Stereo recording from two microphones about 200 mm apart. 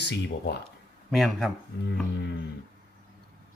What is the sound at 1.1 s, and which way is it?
Speech, centre (ahead or behind).